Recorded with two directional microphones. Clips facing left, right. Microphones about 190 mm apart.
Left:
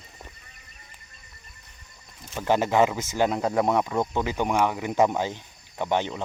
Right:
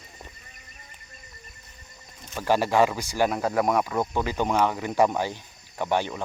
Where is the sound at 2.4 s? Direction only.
20° left (ahead or behind).